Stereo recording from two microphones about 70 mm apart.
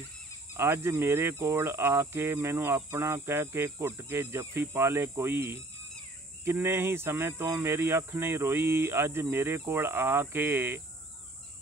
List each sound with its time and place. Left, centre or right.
0.6 s speech: right